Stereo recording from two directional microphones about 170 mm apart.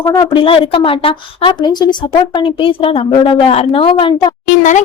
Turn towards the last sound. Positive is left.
turn(degrees=45)  # may be behind; listen again after turning